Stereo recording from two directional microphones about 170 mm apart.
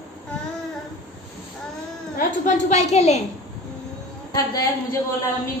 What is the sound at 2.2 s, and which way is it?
A woman's voice, 45° left (ahead or behind).